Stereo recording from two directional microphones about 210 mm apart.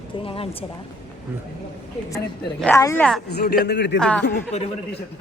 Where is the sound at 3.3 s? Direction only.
50° left (ahead or behind).